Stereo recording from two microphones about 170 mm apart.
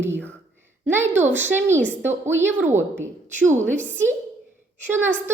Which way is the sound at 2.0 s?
15° right (ahead or behind).